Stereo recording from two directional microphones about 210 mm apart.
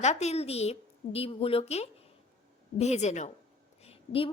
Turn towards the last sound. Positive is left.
turn(degrees=25)  # may be behind; listen again after turning